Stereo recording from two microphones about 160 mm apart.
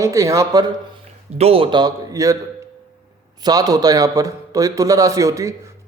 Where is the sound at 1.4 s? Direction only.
35° right (ahead or behind).